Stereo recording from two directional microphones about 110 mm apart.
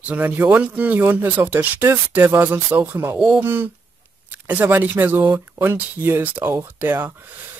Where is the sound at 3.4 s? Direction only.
20° right (ahead or behind).